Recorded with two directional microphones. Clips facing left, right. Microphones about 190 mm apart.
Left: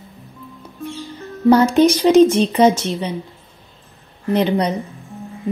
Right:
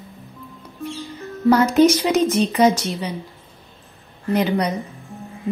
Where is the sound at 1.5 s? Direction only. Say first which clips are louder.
Left 2 dB; 30° left (ahead or behind).